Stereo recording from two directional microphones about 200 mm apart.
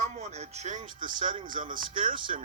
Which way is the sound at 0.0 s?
35° right (ahead or behind).